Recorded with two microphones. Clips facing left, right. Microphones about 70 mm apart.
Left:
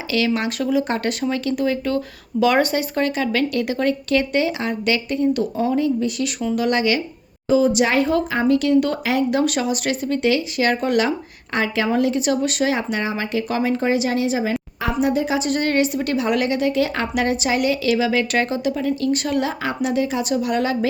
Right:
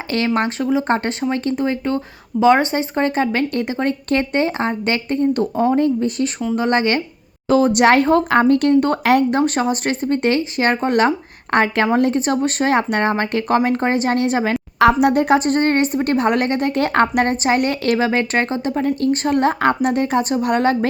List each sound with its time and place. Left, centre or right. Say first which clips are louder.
0.1 s a woman's voice: even; right
0.6 s a woman's voice: right 2 dB; right
7.4 s a woman's voice: right 3 dB; right
11.5 s a woman's voice: right 4 dB; right
12.7 s a woman's voice: right 6 dB; right
15.4 s a woman's voice: right 3 dB; right